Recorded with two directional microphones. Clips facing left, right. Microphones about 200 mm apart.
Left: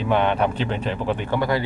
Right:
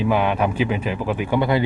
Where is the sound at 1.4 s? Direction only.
20° right (ahead or behind).